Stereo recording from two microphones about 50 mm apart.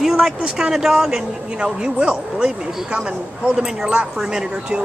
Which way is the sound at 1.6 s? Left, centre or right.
Centre.